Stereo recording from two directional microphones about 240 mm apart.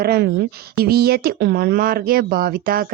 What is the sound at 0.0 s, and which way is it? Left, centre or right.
Speech, right.